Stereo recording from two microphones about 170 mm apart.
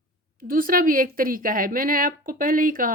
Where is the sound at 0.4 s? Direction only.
55° right (ahead or behind).